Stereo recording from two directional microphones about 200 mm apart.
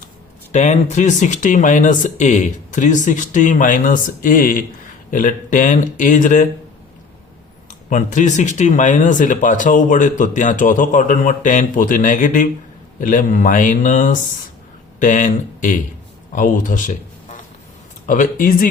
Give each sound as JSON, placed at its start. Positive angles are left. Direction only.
{"t": 0.5, "sound": "speech", "side_deg": 35}
{"t": 7.9, "sound": "speech", "side_deg": 40}
{"t": 18.0, "sound": "speech", "side_deg": 40}